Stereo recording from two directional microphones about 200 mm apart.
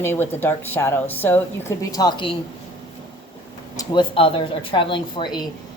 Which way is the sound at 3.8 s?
25° left (ahead or behind).